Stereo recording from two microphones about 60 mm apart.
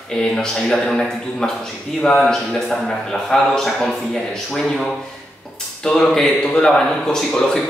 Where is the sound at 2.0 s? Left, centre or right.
Centre.